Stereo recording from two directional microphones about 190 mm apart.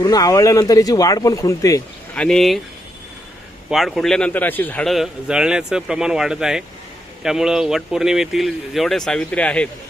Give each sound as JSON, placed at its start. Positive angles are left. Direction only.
{"t": 0.0, "sound": "speech", "side_deg": 20}
{"t": 2.1, "sound": "a man's voice", "side_deg": 5}
{"t": 3.7, "sound": "a man's voice", "side_deg": 0}